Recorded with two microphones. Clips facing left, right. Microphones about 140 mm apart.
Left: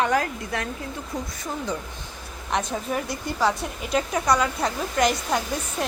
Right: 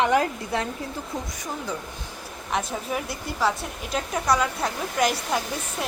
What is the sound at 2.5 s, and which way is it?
A woman's voice, 5° right (ahead or behind).